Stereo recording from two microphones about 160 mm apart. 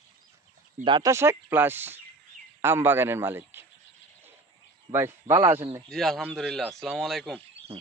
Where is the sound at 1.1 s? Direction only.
15° right (ahead or behind).